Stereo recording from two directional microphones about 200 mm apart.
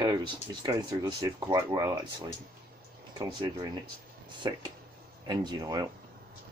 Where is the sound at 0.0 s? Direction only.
20° right (ahead or behind).